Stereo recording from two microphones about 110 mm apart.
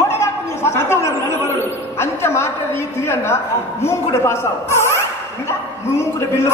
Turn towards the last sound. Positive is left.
turn(degrees=25)  # may be behind; listen again after turning